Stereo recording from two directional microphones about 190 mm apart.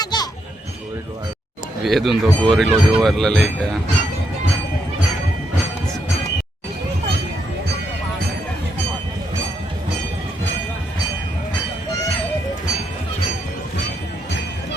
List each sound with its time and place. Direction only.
0.0 s children playing: 20° left (ahead or behind)
1.8 s speech: centre (ahead or behind)